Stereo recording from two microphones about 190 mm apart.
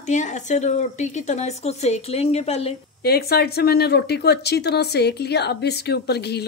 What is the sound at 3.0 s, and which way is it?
Speech, 55° left (ahead or behind).